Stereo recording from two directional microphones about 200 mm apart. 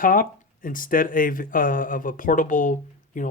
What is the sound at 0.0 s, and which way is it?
Speech, 45° left (ahead or behind).